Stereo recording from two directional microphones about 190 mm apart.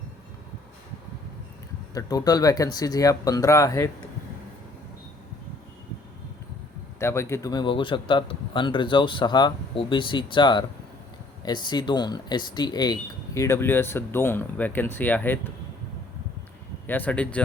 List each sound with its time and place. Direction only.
1.9 s a man's voice: 20° left (ahead or behind)
7.0 s a man's voice: 15° left (ahead or behind)
16.8 s speech: 10° left (ahead or behind)